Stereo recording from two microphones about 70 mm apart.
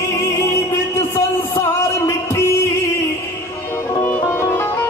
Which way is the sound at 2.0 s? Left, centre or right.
Left.